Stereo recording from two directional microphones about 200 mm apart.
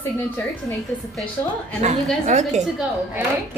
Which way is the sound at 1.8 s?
35° right (ahead or behind).